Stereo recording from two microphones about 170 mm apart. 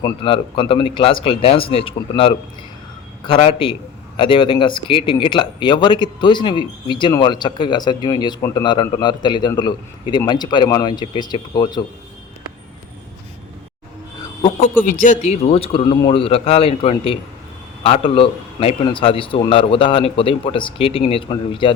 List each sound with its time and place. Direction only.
0.0 s a man's voice: 30° left (ahead or behind)
14.8 s a man's voice: 50° left (ahead or behind); by 21.7 s 30° left (ahead or behind)